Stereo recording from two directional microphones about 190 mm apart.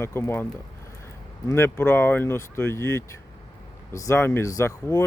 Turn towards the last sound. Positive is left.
turn(degrees=15)  # may be behind; listen again after turning